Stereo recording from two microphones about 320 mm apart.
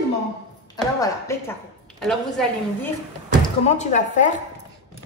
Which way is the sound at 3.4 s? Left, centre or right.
Left.